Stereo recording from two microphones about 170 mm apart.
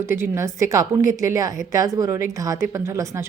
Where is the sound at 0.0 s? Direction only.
15° right (ahead or behind).